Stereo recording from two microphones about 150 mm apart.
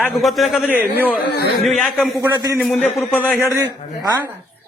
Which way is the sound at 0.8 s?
10° right (ahead or behind).